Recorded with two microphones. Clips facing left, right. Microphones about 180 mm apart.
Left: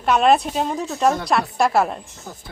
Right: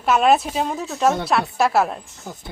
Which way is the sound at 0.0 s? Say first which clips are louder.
Even; centre (ahead or behind).